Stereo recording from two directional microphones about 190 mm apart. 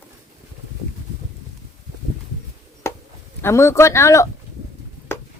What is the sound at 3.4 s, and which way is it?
Speech, 15° left (ahead or behind).